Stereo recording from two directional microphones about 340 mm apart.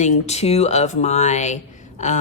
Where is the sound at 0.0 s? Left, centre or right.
Centre.